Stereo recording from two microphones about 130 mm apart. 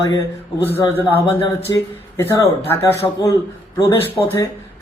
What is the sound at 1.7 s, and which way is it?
Speech, 30° left (ahead or behind).